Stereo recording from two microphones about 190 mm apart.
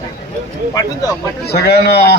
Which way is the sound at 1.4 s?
60° left (ahead or behind).